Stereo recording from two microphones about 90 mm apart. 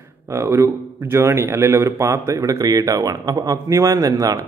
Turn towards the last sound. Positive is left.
turn(degrees=-40)  # may be behind; listen again after turning